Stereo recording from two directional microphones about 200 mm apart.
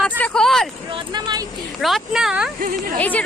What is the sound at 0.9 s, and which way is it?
Speech, 20° right (ahead or behind).